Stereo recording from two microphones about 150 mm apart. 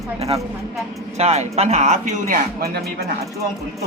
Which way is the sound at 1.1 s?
45° right (ahead or behind).